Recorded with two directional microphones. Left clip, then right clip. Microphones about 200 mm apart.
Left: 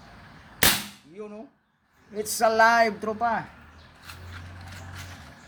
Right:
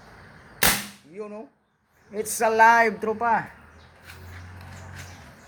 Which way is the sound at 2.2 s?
5° left (ahead or behind).